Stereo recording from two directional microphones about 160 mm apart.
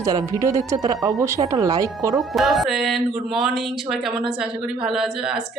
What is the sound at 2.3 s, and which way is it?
Speech, centre (ahead or behind).